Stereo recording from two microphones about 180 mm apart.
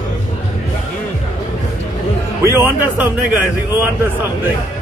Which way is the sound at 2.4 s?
10° right (ahead or behind).